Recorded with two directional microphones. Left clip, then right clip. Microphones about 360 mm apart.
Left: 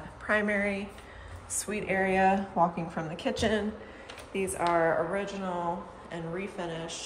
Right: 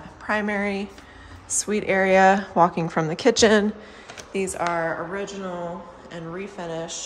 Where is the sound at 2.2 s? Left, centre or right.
Right.